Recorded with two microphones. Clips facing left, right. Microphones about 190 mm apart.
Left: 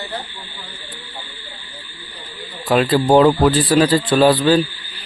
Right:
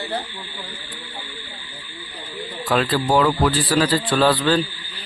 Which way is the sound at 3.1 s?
25° left (ahead or behind).